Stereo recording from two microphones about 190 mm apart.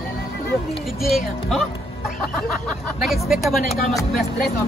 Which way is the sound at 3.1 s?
Centre (ahead or behind).